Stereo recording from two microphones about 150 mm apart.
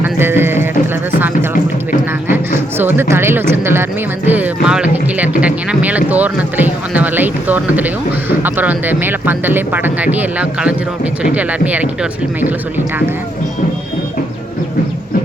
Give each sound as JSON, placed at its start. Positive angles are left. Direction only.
{"t": 0.0, "sound": "music", "side_deg": -15}
{"t": 2.7, "sound": "speech", "side_deg": -15}
{"t": 4.3, "sound": "a sound", "side_deg": -10}
{"t": 8.4, "sound": "speech", "side_deg": -10}